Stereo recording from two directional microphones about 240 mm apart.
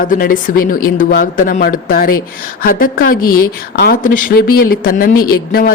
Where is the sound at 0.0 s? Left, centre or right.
Left.